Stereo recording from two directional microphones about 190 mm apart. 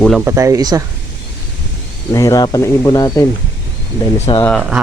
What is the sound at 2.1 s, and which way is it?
Speech, 15° left (ahead or behind).